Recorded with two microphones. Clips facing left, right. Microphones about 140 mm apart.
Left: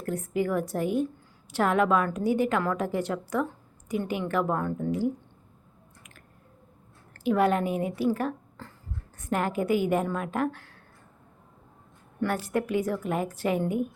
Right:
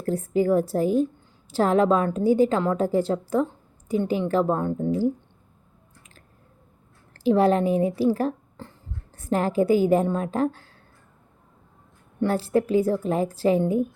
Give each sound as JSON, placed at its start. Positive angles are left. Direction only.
{"t": 0.0, "sound": "a woman's voice", "side_deg": -30}
{"t": 7.1, "sound": "a woman's voice", "side_deg": -30}
{"t": 12.2, "sound": "a woman's voice", "side_deg": -30}